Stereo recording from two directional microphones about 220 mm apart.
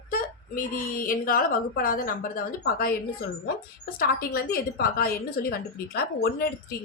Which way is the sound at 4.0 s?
40° left (ahead or behind).